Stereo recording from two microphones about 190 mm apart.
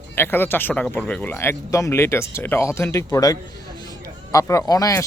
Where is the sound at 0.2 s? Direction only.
10° left (ahead or behind).